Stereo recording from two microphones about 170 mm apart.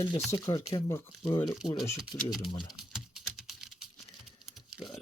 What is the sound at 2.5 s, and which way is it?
Speech, 25° left (ahead or behind).